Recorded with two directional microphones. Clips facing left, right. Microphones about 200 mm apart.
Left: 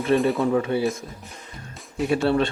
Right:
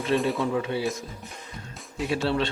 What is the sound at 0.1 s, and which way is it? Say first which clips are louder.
Speech: left 4 dB; 55° left (ahead or behind).